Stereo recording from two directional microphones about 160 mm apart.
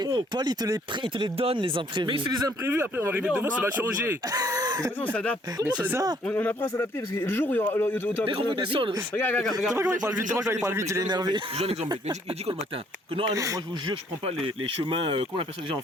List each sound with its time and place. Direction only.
0.0 s speech: 25° right (ahead or behind)
2.6 s speech: 15° right (ahead or behind)
5.0 s speech: 10° left (ahead or behind)
5.6 s speech: 10° right (ahead or behind)
6.2 s speech: 10° left (ahead or behind)
8.4 s speech: 30° right (ahead or behind)
9.1 s speech: 10° left (ahead or behind)
9.4 s speech: centre (ahead or behind)
9.7 s speech: 20° right (ahead or behind)
11.5 s speech: 40° right (ahead or behind)
11.9 s speech: 30° right (ahead or behind)
14.4 s speech: 30° right (ahead or behind)